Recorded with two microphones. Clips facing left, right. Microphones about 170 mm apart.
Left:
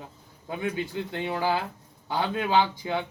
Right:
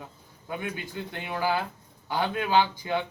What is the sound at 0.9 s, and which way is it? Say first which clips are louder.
A man's voice: left 4 dB; 25° left (ahead or behind).